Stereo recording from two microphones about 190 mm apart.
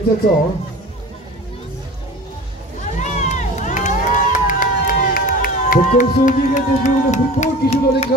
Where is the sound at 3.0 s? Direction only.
40° left (ahead or behind).